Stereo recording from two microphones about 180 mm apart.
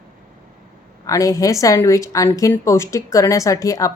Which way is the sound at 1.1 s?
20° left (ahead or behind).